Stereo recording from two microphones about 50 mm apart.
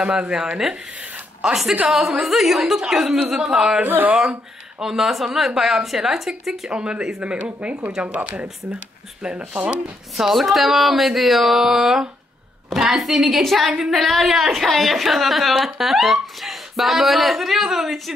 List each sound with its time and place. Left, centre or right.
0.0 s a woman's voice: centre
2.8 s speech: centre
3.8 s speech: right
4.2 s a woman's voice: centre
6.7 s speech: right
7.3 s speech: right
9.5 s speech: right
10.1 s a woman's voice: centre